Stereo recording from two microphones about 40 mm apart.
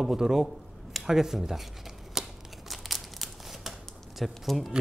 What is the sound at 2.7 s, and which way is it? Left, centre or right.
Crumpling, centre.